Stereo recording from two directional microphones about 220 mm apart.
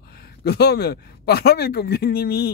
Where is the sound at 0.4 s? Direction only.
50° left (ahead or behind).